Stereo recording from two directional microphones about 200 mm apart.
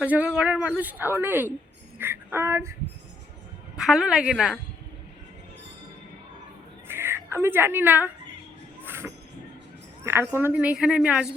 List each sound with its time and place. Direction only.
0.0 s a woman's voice: 5° right (ahead or behind)
3.8 s a woman's voice: 5° right (ahead or behind)
6.8 s speech: 10° right (ahead or behind)
8.8 s a sound: 10° right (ahead or behind)
10.0 s a woman's voice: 10° right (ahead or behind)